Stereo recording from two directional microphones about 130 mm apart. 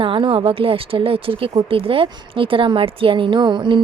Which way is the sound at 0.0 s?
40° right (ahead or behind).